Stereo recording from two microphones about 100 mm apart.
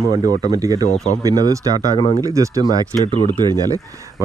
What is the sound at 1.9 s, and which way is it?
Speech, 70° left (ahead or behind).